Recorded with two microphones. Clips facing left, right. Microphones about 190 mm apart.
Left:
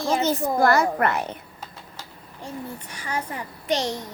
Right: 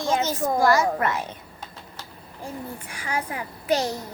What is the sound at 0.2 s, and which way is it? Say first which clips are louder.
A child's voice: left 1 dB; 60° left (ahead or behind).